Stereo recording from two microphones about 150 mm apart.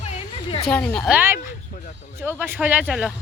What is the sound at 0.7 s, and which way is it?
Speech, 10° left (ahead or behind).